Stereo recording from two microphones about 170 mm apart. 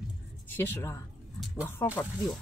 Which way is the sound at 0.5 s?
15° left (ahead or behind).